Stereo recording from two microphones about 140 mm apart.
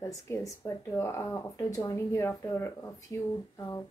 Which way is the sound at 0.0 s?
25° left (ahead or behind).